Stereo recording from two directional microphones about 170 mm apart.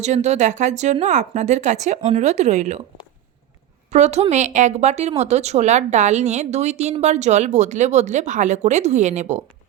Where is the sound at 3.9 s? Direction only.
40° right (ahead or behind).